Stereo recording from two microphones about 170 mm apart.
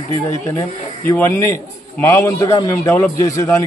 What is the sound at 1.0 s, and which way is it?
A man's voice, 15° left (ahead or behind).